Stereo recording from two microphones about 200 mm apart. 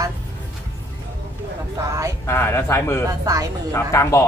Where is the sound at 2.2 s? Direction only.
10° left (ahead or behind).